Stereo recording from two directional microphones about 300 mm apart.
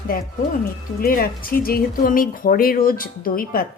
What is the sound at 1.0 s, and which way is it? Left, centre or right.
Speech, left.